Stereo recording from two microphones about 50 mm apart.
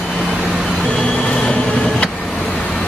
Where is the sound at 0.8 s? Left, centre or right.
Centre.